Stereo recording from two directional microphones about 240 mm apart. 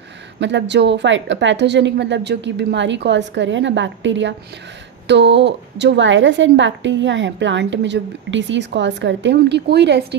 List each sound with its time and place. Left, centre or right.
0.4 s a woman's voice: right